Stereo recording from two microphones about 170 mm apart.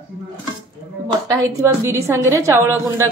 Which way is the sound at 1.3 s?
15° right (ahead or behind).